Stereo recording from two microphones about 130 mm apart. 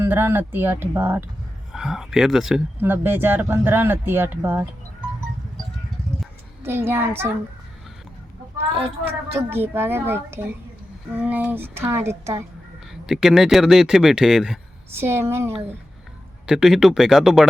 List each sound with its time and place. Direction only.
0.0 s speech: 20° right (ahead or behind)
1.7 s speech: 5° right (ahead or behind)
2.8 s speech: 15° right (ahead or behind)
6.6 s speech: 20° right (ahead or behind)
9.5 s speech: 15° right (ahead or behind)
12.9 s speech: 5° right (ahead or behind)
14.9 s speech: 20° right (ahead or behind)
16.5 s speech: 5° right (ahead or behind)